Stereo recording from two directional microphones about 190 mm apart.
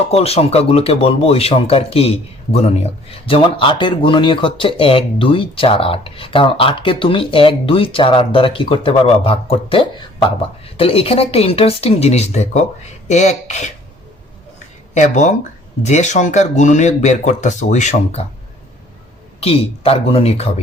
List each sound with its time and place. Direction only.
0.1 s speech: 30° left (ahead or behind)
14.9 s speech: 40° left (ahead or behind)
19.4 s speech: 30° left (ahead or behind)